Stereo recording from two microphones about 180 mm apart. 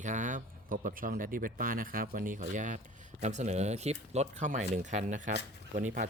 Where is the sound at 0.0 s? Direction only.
45° right (ahead or behind).